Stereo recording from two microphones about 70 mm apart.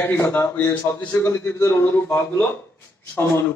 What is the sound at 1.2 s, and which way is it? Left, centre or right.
Speech, left.